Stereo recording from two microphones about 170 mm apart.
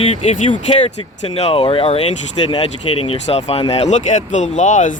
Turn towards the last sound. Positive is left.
turn(degrees=45)  # may be behind; listen again after turning